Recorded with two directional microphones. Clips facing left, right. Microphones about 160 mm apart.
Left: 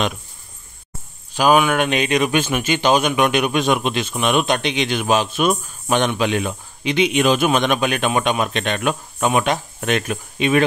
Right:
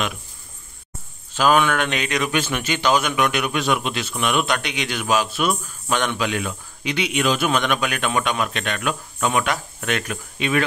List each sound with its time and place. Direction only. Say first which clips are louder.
1.3 s speech: left 3 dB; 10° left (ahead or behind)